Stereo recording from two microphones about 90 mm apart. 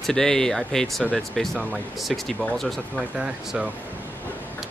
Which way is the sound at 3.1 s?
10° right (ahead or behind).